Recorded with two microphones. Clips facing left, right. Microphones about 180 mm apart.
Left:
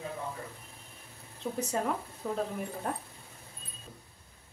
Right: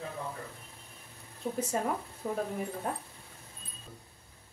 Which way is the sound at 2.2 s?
20° right (ahead or behind).